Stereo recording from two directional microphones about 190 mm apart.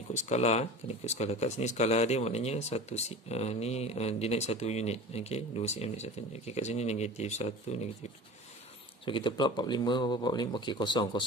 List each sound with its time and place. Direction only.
0.1 s speech: 35° left (ahead or behind)
9.0 s speech: 25° left (ahead or behind)